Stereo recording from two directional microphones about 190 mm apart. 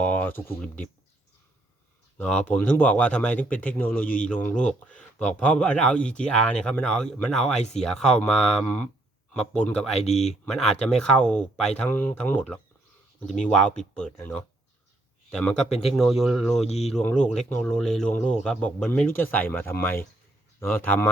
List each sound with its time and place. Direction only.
0.0 s speech: 5° left (ahead or behind)
2.1 s speech: 5° left (ahead or behind)
16.6 s speech: 35° left (ahead or behind)
16.9 s speech: 5° left (ahead or behind)